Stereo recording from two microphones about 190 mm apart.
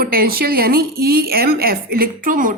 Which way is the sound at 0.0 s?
50° right (ahead or behind).